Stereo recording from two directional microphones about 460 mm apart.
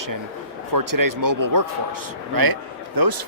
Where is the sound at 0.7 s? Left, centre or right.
Right.